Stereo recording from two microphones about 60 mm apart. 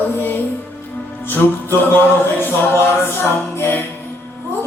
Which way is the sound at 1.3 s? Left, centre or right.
Left.